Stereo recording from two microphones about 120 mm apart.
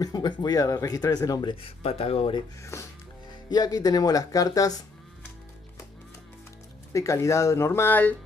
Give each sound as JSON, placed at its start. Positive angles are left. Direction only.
{"t": 0.0, "sound": "speech", "side_deg": 35}
{"t": 2.6, "sound": "speech", "side_deg": 25}
{"t": 6.9, "sound": "speech", "side_deg": 25}